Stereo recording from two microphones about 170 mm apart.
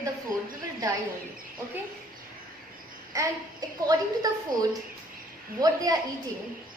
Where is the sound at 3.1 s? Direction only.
20° right (ahead or behind).